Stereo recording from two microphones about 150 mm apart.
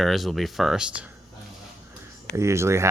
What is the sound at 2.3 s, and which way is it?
Speech, 20° right (ahead or behind).